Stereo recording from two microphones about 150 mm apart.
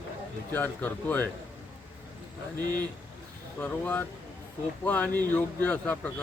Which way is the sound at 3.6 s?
10° left (ahead or behind).